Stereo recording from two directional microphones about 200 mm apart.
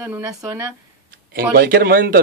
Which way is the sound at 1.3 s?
50° right (ahead or behind).